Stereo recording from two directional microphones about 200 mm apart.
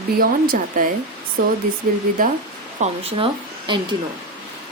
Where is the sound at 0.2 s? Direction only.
45° right (ahead or behind).